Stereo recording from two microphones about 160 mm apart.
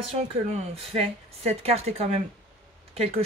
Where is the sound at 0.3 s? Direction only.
40° right (ahead or behind).